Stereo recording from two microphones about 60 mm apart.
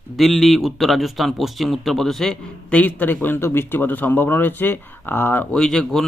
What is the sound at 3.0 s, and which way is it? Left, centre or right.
A man's voice, left.